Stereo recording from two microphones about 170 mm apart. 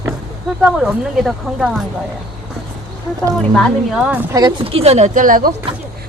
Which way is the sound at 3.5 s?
Centre (ahead or behind).